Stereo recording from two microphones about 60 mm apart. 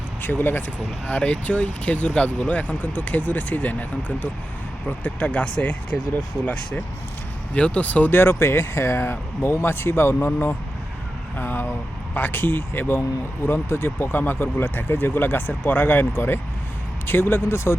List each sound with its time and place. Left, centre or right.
0.2 s speech: left
1.0 s speech: left
8.1 s speech: left
11.3 s speech: left